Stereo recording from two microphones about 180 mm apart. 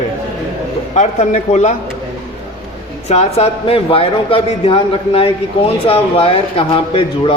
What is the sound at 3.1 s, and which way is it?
A man's voice, 35° left (ahead or behind).